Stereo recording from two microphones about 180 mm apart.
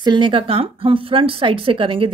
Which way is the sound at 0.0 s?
25° right (ahead or behind).